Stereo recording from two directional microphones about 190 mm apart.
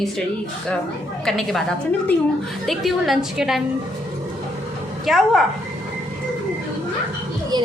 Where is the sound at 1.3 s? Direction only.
Centre (ahead or behind).